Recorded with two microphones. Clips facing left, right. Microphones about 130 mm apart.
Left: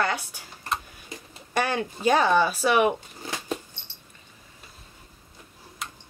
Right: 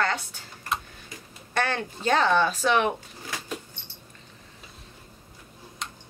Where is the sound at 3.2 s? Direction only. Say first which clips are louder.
Left 4 dB; 25° left (ahead or behind).